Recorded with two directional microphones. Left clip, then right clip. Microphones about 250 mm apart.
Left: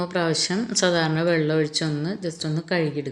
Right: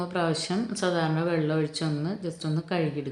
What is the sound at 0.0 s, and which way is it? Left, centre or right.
Speech, centre.